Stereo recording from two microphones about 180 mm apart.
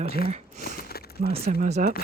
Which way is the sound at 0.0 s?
60° left (ahead or behind).